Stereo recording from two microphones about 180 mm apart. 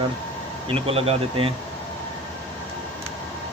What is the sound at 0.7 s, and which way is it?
Speech, 30° right (ahead or behind).